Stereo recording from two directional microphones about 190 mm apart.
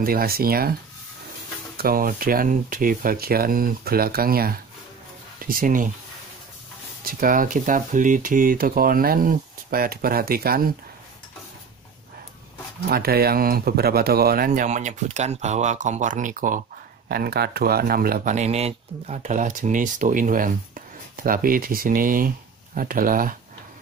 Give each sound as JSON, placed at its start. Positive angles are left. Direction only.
{"t": 0.0, "sound": "speech", "side_deg": -50}
{"t": 1.8, "sound": "speech", "side_deg": -50}
{"t": 7.1, "sound": "speech", "side_deg": -45}
{"t": 12.9, "sound": "speech", "side_deg": -55}
{"t": 17.1, "sound": "speech", "side_deg": -55}